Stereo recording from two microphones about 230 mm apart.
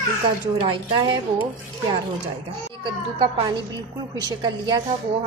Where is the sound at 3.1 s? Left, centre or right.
Centre.